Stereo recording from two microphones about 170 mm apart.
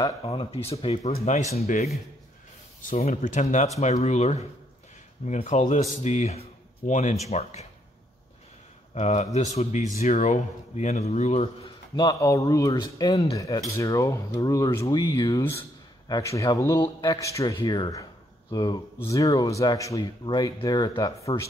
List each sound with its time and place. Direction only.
0.0 s a man's voice: 30° left (ahead or behind)
2.8 s a man's voice: 50° left (ahead or behind)
8.9 s a man's voice: 40° left (ahead or behind)
11.9 s speech: 20° left (ahead or behind)